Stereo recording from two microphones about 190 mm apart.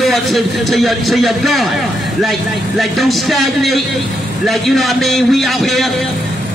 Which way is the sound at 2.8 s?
Centre (ahead or behind).